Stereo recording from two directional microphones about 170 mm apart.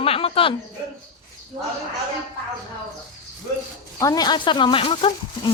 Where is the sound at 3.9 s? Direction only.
20° left (ahead or behind).